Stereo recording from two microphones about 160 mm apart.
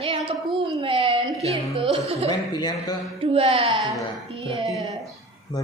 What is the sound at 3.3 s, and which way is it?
Speech, 35° right (ahead or behind).